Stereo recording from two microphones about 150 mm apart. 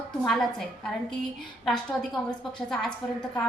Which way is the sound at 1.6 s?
Centre (ahead or behind).